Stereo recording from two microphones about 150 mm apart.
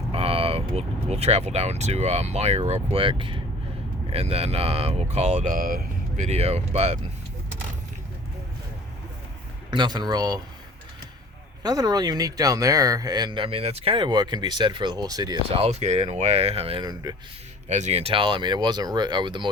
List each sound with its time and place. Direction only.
0.1 s speech: 40° right (ahead or behind)
9.6 s speech: 30° right (ahead or behind)
11.6 s speech: 25° right (ahead or behind)
15.4 s speech: 40° right (ahead or behind)
16.8 s speech: 25° right (ahead or behind)
17.7 s speech: 50° right (ahead or behind); by 19.5 s 30° right (ahead or behind)